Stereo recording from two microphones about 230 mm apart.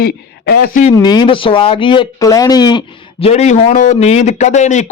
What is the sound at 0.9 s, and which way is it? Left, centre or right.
Speech, centre.